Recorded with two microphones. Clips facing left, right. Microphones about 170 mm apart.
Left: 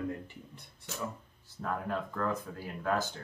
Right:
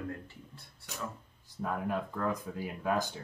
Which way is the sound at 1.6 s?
10° right (ahead or behind).